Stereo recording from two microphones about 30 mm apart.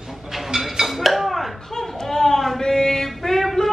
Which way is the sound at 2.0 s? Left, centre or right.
Centre.